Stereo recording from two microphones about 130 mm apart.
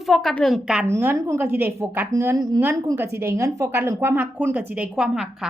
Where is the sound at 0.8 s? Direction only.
20° right (ahead or behind).